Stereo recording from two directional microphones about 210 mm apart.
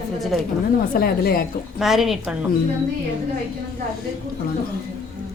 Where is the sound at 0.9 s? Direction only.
45° left (ahead or behind).